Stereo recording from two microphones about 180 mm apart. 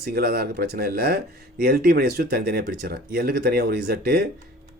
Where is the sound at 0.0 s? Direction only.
60° right (ahead or behind).